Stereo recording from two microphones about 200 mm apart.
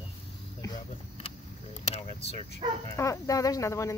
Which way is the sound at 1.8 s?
30° left (ahead or behind).